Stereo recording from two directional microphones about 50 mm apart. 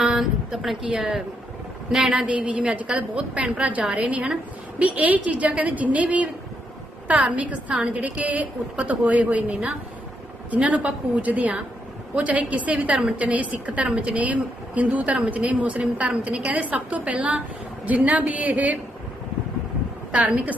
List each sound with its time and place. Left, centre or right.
0.0 s a woman's voice: centre; by 9.6 s right
10.6 s a woman's voice: right
20.1 s a woman's voice: right